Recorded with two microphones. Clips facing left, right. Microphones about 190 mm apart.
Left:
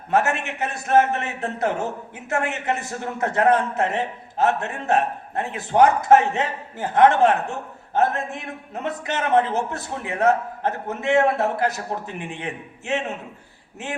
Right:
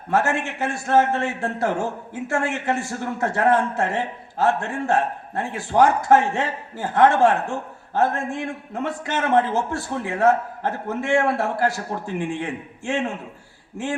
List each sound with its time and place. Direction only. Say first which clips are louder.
0.1 s a man's voice: even; 20° left (ahead or behind)